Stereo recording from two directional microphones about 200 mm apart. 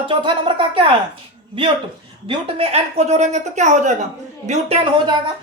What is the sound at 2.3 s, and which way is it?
A woman's voice, 30° right (ahead or behind).